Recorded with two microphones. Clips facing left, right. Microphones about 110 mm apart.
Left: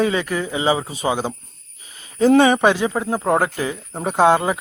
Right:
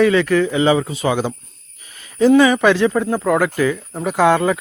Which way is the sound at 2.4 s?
30° left (ahead or behind).